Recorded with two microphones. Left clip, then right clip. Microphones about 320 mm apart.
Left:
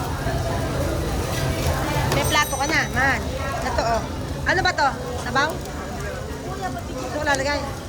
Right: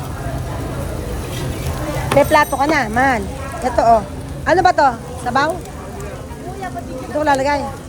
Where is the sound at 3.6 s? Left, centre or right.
Centre.